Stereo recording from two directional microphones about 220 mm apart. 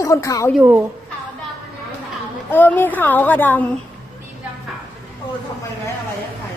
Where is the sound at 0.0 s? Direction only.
15° left (ahead or behind).